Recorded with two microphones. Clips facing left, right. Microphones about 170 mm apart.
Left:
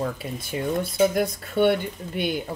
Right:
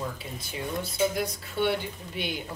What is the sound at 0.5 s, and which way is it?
Speech, 55° left (ahead or behind).